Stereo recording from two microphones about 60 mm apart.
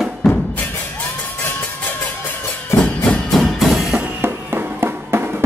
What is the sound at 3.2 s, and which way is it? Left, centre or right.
Music, centre.